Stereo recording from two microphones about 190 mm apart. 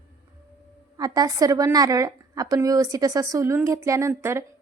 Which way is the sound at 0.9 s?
20° right (ahead or behind).